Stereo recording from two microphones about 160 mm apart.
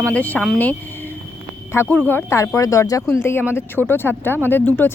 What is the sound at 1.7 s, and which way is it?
Speech, 15° left (ahead or behind).